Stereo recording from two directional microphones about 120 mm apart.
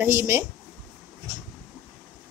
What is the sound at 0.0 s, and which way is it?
Speech, 20° right (ahead or behind).